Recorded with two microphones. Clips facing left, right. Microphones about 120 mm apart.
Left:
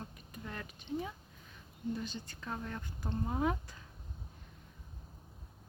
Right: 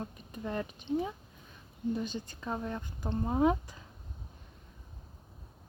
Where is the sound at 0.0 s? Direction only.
25° right (ahead or behind).